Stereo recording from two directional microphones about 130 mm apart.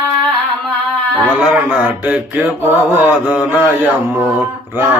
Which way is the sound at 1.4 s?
10° right (ahead or behind).